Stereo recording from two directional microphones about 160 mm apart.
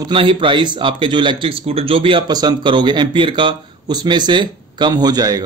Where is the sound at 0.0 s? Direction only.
30° right (ahead or behind).